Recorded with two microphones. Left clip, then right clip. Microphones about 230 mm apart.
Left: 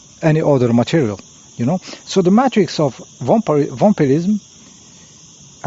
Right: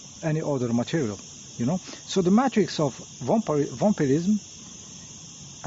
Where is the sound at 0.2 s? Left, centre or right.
Left.